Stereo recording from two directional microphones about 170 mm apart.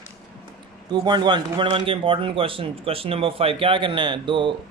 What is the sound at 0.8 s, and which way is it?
A man's voice, 25° right (ahead or behind).